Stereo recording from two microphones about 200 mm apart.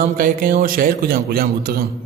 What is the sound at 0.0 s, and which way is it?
Mantra, 45° right (ahead or behind).